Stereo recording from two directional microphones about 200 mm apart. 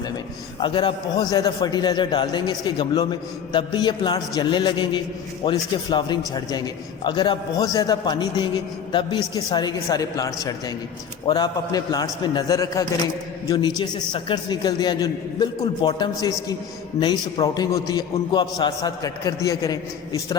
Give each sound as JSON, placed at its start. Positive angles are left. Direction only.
{"t": 0.6, "sound": "a man's voice", "side_deg": 25}